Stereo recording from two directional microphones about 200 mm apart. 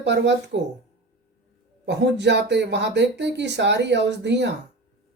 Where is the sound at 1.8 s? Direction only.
60° right (ahead or behind).